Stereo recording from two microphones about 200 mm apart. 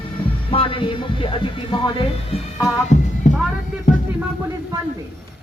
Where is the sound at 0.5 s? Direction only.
25° left (ahead or behind).